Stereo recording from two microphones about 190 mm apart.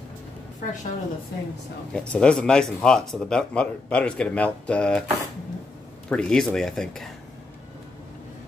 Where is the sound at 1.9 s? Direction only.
5° left (ahead or behind).